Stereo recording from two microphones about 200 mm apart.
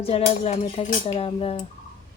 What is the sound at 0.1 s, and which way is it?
Speech, 30° left (ahead or behind).